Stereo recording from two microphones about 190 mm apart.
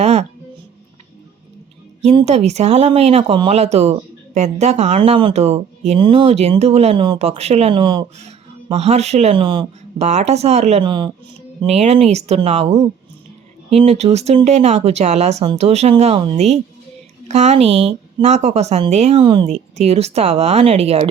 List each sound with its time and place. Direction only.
0.0 s music: 35° right (ahead or behind)
2.0 s a woman's voice: 35° right (ahead or behind)
8.7 s a woman's voice: 35° right (ahead or behind)
17.2 s a woman's voice: 35° right (ahead or behind)